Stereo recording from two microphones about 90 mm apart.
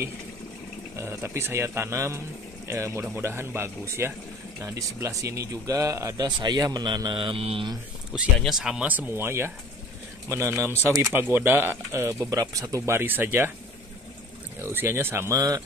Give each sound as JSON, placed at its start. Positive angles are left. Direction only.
{"t": 0.9, "sound": "speech", "side_deg": -30}
{"t": 6.2, "sound": "speech", "side_deg": -50}
{"t": 8.1, "sound": "speech", "side_deg": -5}
{"t": 8.8, "sound": "speech", "side_deg": -20}
{"t": 14.6, "sound": "speech", "side_deg": -25}
{"t": 15.3, "sound": "speech", "side_deg": -45}